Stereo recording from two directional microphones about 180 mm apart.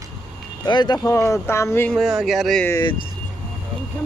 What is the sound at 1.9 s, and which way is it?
Speech, centre (ahead or behind).